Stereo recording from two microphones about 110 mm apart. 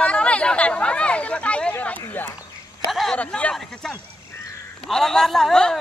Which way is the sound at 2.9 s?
Centre (ahead or behind).